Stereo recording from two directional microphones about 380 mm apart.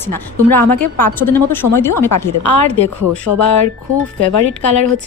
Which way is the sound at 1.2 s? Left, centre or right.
Centre.